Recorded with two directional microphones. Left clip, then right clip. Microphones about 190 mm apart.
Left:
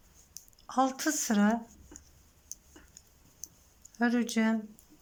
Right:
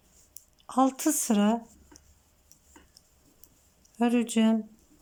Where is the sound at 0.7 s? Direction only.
15° right (ahead or behind).